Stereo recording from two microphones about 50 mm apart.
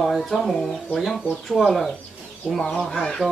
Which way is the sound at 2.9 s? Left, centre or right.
Centre.